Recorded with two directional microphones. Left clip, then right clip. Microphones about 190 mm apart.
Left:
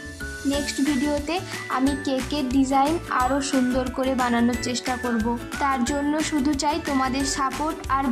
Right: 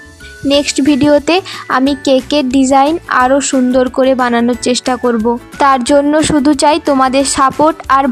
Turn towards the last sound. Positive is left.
turn(degrees=-45)  # may be behind; listen again after turning